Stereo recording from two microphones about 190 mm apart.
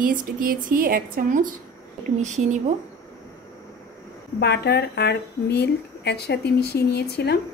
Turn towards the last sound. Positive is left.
turn(degrees=60)  # may be behind; listen again after turning